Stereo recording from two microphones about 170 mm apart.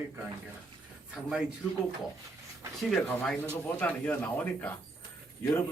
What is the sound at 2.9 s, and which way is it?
Speech, 5° left (ahead or behind).